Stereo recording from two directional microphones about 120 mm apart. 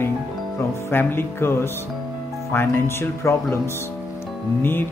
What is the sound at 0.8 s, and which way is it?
Speech, 20° left (ahead or behind).